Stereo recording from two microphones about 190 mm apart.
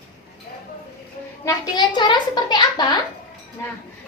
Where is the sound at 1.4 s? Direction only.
25° left (ahead or behind).